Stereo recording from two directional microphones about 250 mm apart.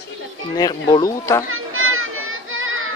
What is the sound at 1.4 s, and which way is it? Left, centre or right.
Children playing, right.